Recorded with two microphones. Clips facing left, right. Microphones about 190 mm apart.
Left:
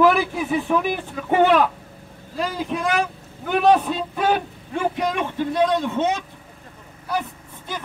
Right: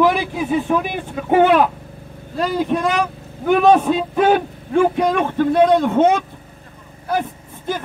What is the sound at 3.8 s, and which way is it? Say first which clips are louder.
A man's voice: right 7 dB; 50° right (ahead or behind).